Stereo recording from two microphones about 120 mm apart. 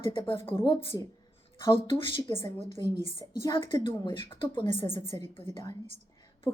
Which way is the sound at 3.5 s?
45° left (ahead or behind).